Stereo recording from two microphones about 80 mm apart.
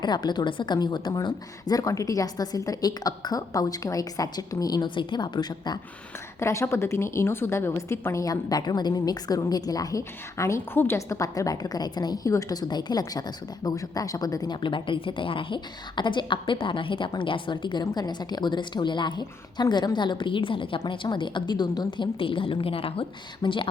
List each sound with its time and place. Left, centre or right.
0.0 s a woman's voice: left
6.4 s a woman's voice: left
10.0 s a woman's voice: left